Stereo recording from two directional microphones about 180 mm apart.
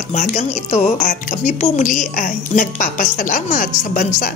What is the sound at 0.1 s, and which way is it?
Speech, 40° left (ahead or behind).